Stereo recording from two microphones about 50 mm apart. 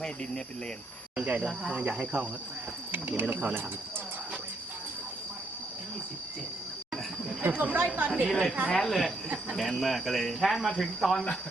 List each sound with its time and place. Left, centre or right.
1.1 s speech: right
2.9 s speech: right
7.5 s speech: right
8.3 s speech: centre